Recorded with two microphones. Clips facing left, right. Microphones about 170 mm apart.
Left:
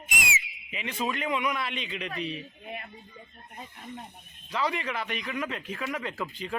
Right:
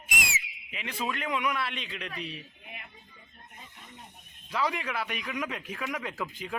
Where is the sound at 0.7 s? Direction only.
Centre (ahead or behind).